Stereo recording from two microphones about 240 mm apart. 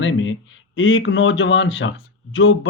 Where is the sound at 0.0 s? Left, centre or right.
Left.